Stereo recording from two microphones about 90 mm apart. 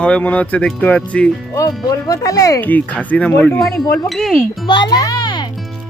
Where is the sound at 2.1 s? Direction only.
40° left (ahead or behind).